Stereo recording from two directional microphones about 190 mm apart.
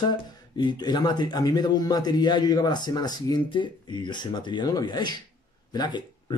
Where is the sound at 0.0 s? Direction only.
20° left (ahead or behind).